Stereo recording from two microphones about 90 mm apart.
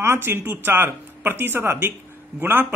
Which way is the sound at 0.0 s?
25° right (ahead or behind).